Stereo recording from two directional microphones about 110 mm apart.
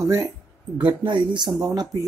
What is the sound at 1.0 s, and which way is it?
Speech, 40° right (ahead or behind).